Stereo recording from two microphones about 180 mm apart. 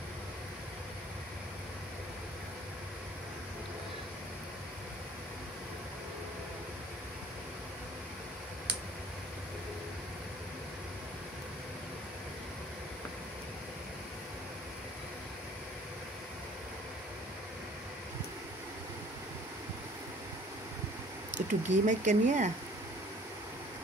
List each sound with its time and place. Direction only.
21.4 s speech: 45° right (ahead or behind)